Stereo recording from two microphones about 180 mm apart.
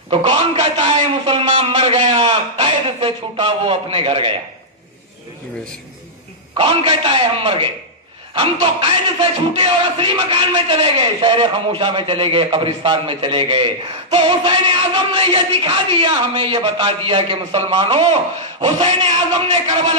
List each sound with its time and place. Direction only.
0.1 s a man's voice: 30° right (ahead or behind)
6.5 s speech: 30° right (ahead or behind)